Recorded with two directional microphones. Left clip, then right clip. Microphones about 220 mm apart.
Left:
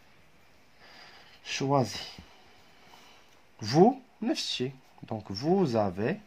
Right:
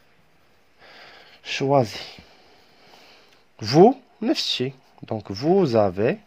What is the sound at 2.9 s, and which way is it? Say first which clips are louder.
Speech: right 6 dB; 40° right (ahead or behind).